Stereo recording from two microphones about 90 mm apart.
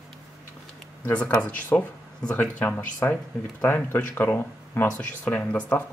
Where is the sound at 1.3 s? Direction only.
10° left (ahead or behind).